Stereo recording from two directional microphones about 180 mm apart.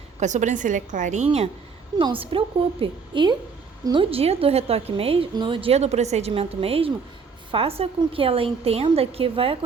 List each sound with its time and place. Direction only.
0.2 s a woman's voice: 40° right (ahead or behind)